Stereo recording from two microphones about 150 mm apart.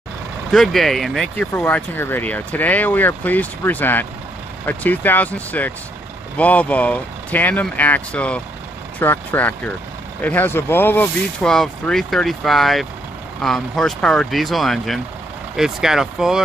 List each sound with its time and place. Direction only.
0.5 s speech: centre (ahead or behind)